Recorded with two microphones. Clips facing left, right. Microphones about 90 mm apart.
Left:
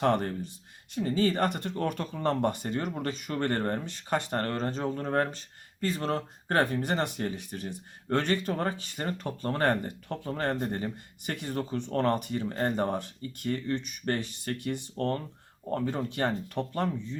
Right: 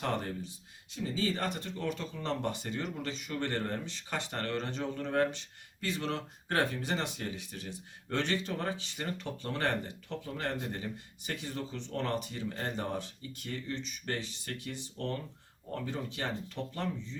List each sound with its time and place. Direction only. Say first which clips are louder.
0.0 s speech: left 8 dB; 55° left (ahead or behind)